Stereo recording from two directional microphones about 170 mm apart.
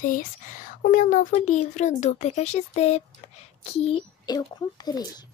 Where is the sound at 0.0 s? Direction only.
50° left (ahead or behind); by 4.0 s 35° left (ahead or behind).